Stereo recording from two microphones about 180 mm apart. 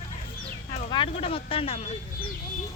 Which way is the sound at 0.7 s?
30° left (ahead or behind).